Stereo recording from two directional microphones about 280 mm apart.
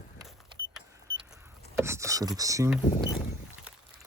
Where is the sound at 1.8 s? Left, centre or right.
Centre.